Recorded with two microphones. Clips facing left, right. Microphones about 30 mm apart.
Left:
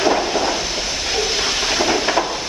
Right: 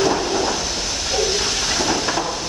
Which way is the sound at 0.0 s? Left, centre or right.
Centre.